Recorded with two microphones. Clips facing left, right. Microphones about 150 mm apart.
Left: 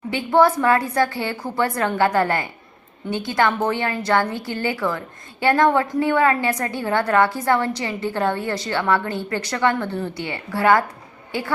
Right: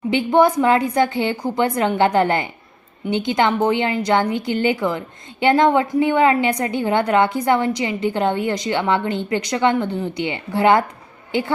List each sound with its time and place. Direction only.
0.1 s a woman's voice: 20° right (ahead or behind)